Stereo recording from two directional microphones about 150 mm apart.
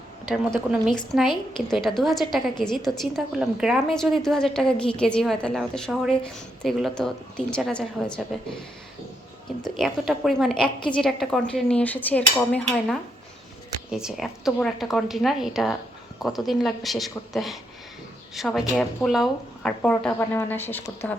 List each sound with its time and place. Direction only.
0.7 s a woman's voice: centre (ahead or behind)
1.3 s a woman's voice: 30° left (ahead or behind)
1.7 s a woman's voice: centre (ahead or behind)
9.7 s a woman's voice: centre (ahead or behind)
13.9 s a woman's voice: 5° right (ahead or behind); by 21.1 s 15° left (ahead or behind)